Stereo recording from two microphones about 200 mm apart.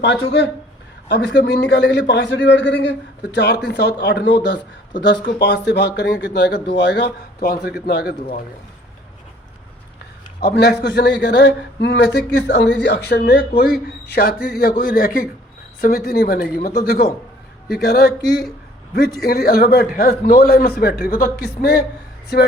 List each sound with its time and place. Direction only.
1.0 s a man's voice: 55° left (ahead or behind)
10.4 s a man's voice: 55° left (ahead or behind)